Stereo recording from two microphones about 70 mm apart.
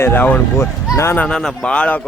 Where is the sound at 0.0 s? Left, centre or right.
Left.